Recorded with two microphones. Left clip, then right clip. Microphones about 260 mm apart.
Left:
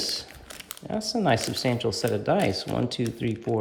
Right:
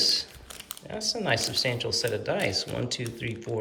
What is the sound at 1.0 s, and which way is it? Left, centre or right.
Speech, centre.